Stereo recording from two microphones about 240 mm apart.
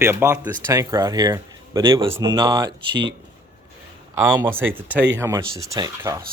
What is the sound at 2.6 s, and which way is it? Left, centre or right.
Speech, right.